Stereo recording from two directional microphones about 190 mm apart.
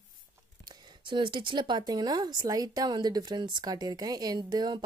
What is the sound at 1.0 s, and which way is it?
A woman's voice, 25° right (ahead or behind).